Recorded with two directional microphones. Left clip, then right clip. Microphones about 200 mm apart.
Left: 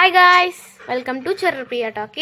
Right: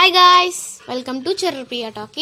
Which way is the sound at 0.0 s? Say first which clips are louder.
Right 1 dB; 35° right (ahead or behind).